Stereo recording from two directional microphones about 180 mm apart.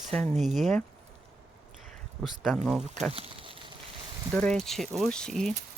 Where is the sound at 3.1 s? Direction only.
30° right (ahead or behind).